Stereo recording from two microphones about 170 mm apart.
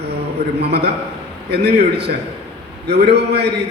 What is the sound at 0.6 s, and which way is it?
A man's voice, 70° right (ahead or behind).